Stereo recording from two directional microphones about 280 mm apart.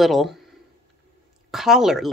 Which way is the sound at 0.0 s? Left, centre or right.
Centre.